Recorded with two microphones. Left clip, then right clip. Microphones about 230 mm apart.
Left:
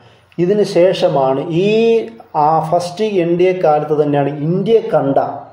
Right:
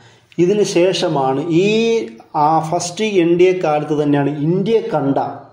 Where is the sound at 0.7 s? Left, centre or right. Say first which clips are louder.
Left 3 dB; right.